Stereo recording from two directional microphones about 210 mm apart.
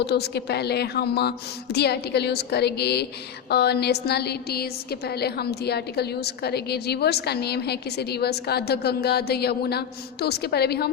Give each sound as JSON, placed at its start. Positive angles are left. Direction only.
{"t": 0.0, "sound": "a woman's voice", "side_deg": 50}